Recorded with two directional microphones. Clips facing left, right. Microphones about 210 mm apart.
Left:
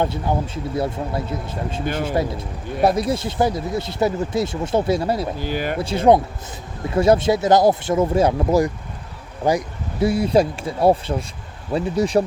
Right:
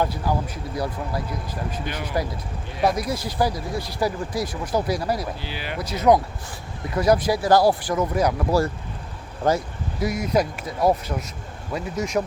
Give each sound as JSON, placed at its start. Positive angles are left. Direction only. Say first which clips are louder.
{"t": 0.0, "sound": "speech", "louder": "left 2 dB", "side_deg": 25}
{"t": 1.8, "sound": "speech", "louder": "left 7 dB", "side_deg": 50}
{"t": 2.8, "sound": "speech", "louder": "left 4 dB", "side_deg": 25}
{"t": 5.4, "sound": "speech", "louder": "left 8 dB", "side_deg": 45}
{"t": 5.8, "sound": "speech", "louder": "left 2 dB", "side_deg": 30}
{"t": 10.0, "sound": "speech", "louder": "left 6 dB", "side_deg": 30}